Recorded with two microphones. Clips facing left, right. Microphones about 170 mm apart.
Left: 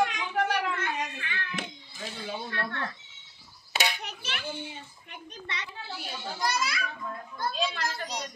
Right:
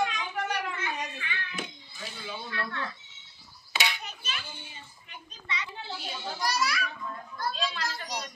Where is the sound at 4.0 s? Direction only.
75° left (ahead or behind).